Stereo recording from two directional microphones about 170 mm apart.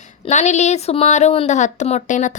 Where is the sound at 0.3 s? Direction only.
45° left (ahead or behind).